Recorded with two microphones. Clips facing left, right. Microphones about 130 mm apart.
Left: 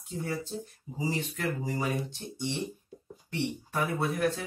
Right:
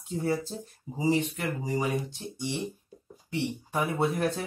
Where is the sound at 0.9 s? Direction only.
20° right (ahead or behind).